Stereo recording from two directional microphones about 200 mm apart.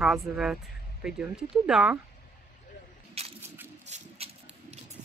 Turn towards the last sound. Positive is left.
turn(degrees=-35)  # may be behind; listen again after turning